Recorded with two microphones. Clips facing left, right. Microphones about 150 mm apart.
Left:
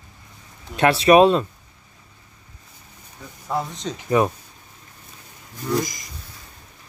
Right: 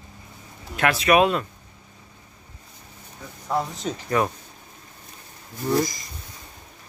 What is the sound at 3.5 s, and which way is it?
Speech, centre (ahead or behind).